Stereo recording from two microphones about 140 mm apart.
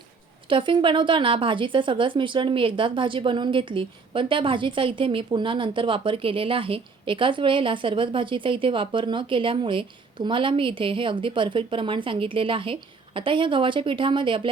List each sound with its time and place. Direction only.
0.4 s a woman's voice: 35° right (ahead or behind)